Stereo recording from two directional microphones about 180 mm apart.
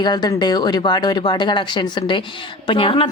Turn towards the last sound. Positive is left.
turn(degrees=30)  # may be behind; listen again after turning